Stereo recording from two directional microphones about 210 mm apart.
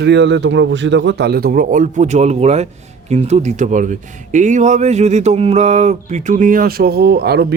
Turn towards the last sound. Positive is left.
turn(degrees=-50)  # may be behind; listen again after turning